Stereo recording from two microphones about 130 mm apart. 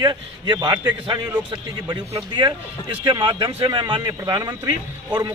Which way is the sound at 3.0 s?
35° right (ahead or behind).